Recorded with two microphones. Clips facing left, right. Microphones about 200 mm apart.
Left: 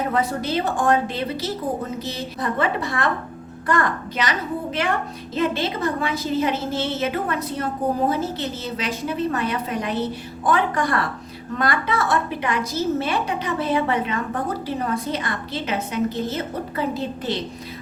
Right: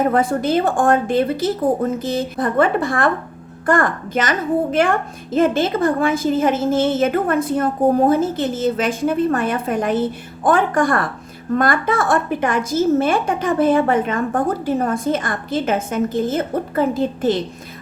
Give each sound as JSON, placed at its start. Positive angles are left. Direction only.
{"t": 0.0, "sound": "a woman's voice", "side_deg": -50}